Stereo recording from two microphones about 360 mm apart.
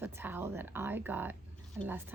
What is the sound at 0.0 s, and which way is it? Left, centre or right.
A woman's voice, centre.